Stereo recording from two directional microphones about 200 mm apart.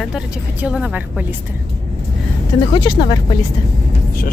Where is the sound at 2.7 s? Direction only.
25° left (ahead or behind).